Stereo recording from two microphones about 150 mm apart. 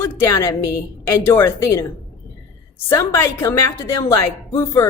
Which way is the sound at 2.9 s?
15° left (ahead or behind).